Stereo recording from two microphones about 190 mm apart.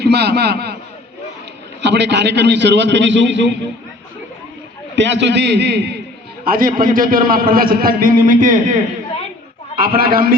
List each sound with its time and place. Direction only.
0.0 s a man's voice: 60° right (ahead or behind)
1.8 s a man's voice: 65° right (ahead or behind)
4.9 s a man's voice: 70° right (ahead or behind)
6.4 s a man's voice: 50° right (ahead or behind)
9.7 s a man's voice: 50° right (ahead or behind)